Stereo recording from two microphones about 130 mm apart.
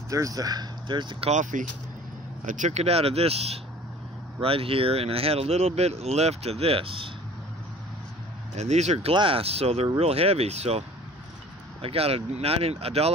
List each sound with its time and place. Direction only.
0.1 s speech: 25° right (ahead or behind)
1.3 s speech: 75° right (ahead or behind); by 7.1 s 45° right (ahead or behind)
8.5 s speech: 60° right (ahead or behind)
9.1 s speech: 40° right (ahead or behind)
11.8 s speech: 50° right (ahead or behind)